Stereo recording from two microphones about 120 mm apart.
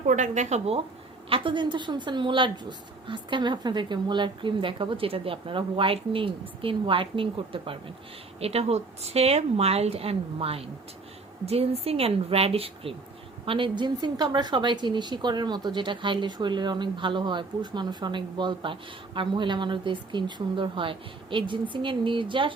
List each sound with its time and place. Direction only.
0.1 s speech: 85° right
1.3 s a woman's voice: 45° right (ahead or behind)